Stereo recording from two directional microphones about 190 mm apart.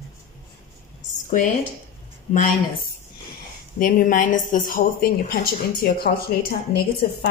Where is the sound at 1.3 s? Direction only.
40° left (ahead or behind).